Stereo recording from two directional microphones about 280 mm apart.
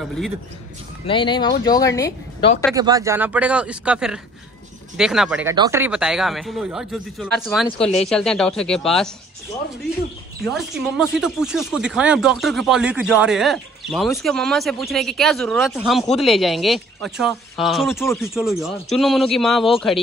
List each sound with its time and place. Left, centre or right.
1.0 s speech: centre
2.7 s speech: centre
10.4 s speech: centre